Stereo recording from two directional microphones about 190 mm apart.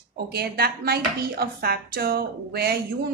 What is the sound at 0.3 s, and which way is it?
Speech, 55° right (ahead or behind).